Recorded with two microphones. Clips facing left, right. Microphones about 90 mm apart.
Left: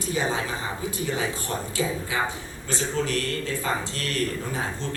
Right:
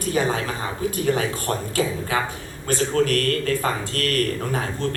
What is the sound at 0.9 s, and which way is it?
Speech, 55° right (ahead or behind).